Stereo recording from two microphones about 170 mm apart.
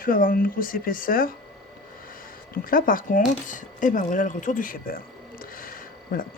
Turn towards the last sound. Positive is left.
turn(degrees=55)  # may be behind; listen again after turning